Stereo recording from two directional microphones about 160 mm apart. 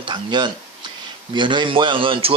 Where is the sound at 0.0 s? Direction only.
30° right (ahead or behind).